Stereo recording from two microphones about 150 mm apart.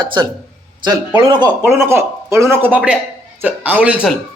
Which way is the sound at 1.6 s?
15° right (ahead or behind).